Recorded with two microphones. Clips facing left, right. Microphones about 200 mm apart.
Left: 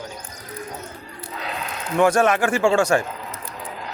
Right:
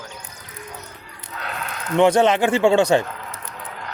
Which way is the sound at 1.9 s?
20° right (ahead or behind).